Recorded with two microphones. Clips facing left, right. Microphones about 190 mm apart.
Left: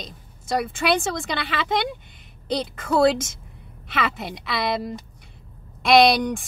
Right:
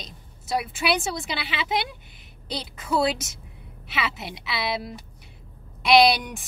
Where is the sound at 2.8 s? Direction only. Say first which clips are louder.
Left 5 dB; 50° left (ahead or behind).